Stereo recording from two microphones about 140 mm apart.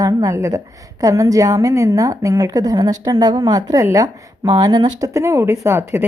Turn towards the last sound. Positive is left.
turn(degrees=-15)  # may be behind; listen again after turning